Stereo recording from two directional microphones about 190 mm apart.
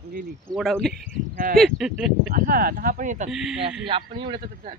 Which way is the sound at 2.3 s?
50° right (ahead or behind).